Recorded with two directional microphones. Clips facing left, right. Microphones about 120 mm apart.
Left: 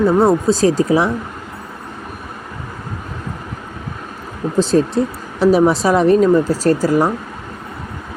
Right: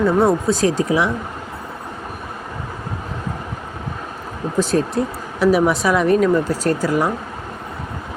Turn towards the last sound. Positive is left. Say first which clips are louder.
# left 4 dB
turn(degrees=35)  # may be behind; listen again after turning